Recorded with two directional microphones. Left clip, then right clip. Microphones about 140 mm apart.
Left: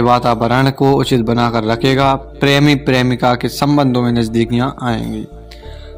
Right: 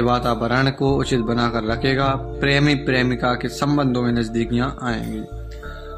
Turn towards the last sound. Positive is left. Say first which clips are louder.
# left 6 dB
turn(degrees=35)  # may be behind; listen again after turning